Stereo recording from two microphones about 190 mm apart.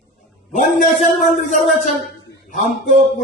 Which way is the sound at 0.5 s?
40° left (ahead or behind).